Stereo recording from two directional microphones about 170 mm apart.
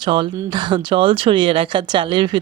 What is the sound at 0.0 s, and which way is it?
A woman's voice, 25° right (ahead or behind).